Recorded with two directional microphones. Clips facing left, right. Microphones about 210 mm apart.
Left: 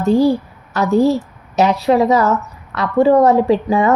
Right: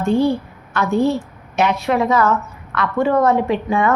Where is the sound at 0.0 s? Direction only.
35° left (ahead or behind).